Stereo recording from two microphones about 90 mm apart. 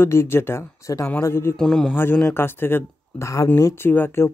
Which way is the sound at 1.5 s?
5° left (ahead or behind).